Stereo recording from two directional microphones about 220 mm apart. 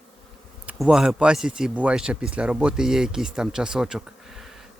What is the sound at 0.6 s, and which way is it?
Speech, 5° right (ahead or behind).